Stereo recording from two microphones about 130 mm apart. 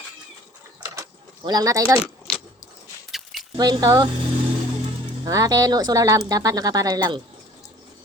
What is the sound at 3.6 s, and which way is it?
Speech, 30° right (ahead or behind).